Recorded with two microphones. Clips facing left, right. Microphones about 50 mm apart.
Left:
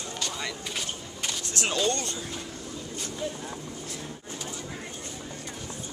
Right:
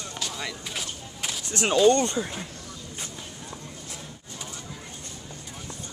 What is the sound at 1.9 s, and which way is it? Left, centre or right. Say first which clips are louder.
Speech: right 8 dB; right.